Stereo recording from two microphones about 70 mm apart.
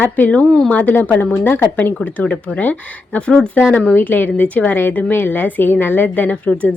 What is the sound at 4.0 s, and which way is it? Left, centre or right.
Speech, left.